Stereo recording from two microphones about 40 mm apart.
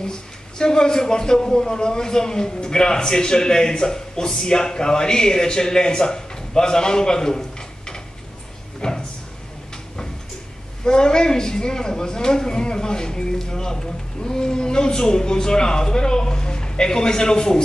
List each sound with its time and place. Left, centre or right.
0.0 s speech: centre
8.8 s a sound: centre
10.8 s speech: centre